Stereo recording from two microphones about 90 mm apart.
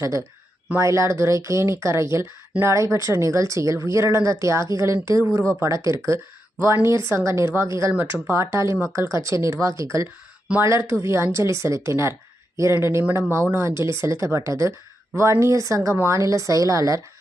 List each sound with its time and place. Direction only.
0.0 s speech: 40° right (ahead or behind)